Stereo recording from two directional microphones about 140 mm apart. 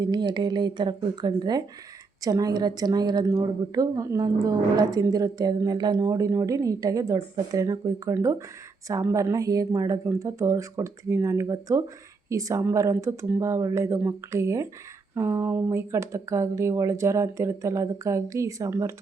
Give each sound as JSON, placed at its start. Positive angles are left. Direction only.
{"t": 0.0, "sound": "a woman's voice", "side_deg": -30}